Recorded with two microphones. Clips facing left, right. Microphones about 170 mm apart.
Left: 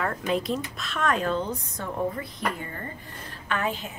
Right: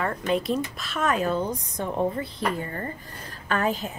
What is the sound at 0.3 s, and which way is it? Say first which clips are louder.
Speech: right 3 dB; centre (ahead or behind).